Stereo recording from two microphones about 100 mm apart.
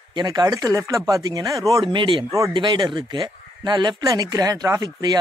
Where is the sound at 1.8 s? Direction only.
55° right (ahead or behind).